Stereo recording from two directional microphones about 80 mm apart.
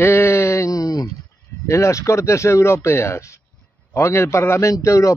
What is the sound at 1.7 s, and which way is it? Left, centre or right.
A man's voice, left.